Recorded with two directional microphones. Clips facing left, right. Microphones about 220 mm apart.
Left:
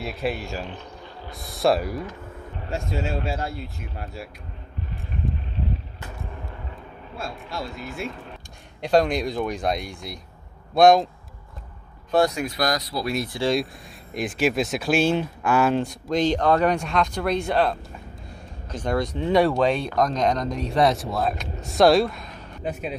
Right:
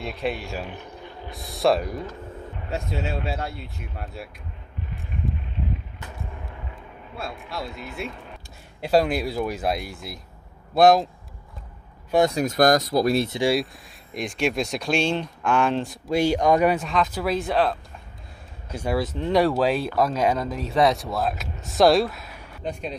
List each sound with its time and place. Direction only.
0.0 s speech: 5° left (ahead or behind)
0.7 s a sound: 15° right (ahead or behind)
1.3 s speech: centre (ahead or behind)
7.2 s speech: centre (ahead or behind)
12.4 s speech: 45° right (ahead or behind)
13.1 s speech: 25° right (ahead or behind)
14.1 s speech: 5° left (ahead or behind)
22.6 s speech: 5° left (ahead or behind)